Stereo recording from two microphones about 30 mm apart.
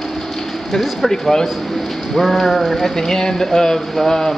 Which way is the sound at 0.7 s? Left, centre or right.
Centre.